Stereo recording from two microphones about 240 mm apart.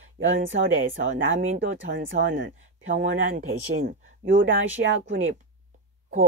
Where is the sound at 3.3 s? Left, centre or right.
Right.